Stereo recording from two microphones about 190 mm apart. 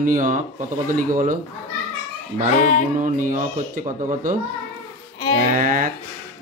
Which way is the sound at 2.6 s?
40° left (ahead or behind).